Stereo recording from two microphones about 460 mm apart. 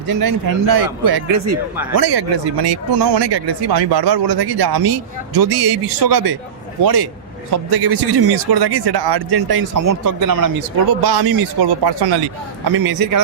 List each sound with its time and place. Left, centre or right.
0.1 s speech: right